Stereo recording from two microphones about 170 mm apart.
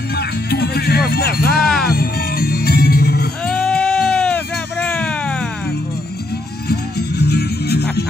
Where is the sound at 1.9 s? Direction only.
65° left (ahead or behind).